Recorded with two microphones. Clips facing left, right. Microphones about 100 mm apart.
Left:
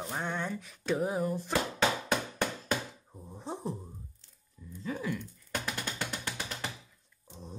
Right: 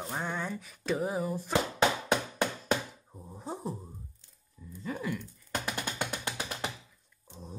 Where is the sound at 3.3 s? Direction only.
5° right (ahead or behind).